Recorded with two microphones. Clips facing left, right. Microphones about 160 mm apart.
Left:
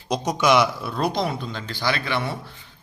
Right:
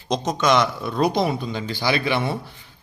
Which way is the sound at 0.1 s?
10° left (ahead or behind).